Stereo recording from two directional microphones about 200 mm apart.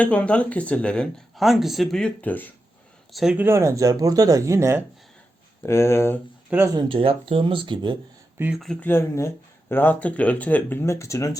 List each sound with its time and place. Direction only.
0.0 s speech: 5° left (ahead or behind); by 4.8 s 15° right (ahead or behind)
5.6 s speech: 15° left (ahead or behind)
6.7 s speech: 25° right (ahead or behind)
8.4 s speech: 5° right (ahead or behind); by 11.3 s 15° left (ahead or behind)